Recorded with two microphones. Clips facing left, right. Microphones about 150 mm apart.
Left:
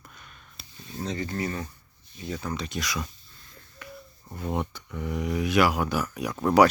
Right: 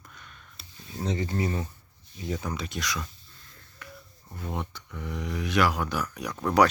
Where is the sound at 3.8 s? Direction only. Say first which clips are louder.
Left 3 dB; 10° left (ahead or behind).